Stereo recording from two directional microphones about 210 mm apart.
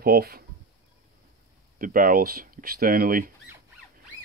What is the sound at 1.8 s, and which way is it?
Speech, 40° right (ahead or behind).